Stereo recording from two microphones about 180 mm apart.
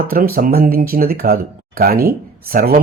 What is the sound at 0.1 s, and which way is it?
Speech, 55° right (ahead or behind).